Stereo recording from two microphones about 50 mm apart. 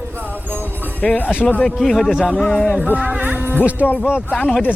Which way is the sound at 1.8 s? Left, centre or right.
Centre.